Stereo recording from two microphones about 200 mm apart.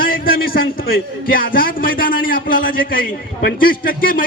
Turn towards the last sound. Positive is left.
turn(degrees=45)  # may be behind; listen again after turning